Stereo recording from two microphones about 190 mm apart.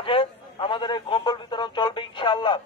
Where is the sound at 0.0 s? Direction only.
30° left (ahead or behind).